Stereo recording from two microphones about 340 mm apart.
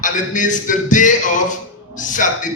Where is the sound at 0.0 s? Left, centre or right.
Left.